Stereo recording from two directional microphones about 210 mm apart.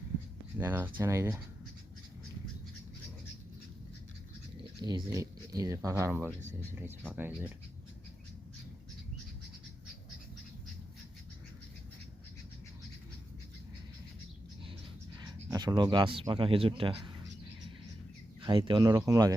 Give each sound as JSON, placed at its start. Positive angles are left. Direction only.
{"t": 0.6, "sound": "speech", "side_deg": -10}
{"t": 4.8, "sound": "speech", "side_deg": -20}
{"t": 15.2, "sound": "speech", "side_deg": -20}
{"t": 18.4, "sound": "speech", "side_deg": -20}